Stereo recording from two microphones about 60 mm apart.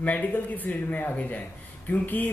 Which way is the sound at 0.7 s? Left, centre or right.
Left.